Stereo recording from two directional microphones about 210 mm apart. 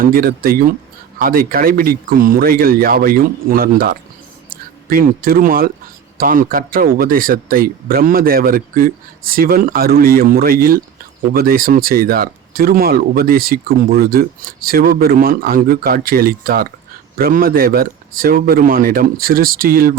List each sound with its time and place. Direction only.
0.0 s speech: 45° right (ahead or behind)